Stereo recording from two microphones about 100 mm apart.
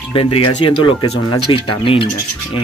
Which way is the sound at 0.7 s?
50° left (ahead or behind).